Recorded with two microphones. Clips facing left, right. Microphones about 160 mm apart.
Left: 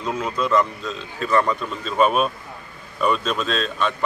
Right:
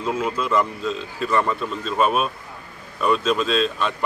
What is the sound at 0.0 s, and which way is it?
A man's voice, 5° right (ahead or behind).